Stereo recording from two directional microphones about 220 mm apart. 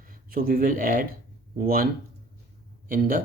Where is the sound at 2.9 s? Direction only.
40° right (ahead or behind).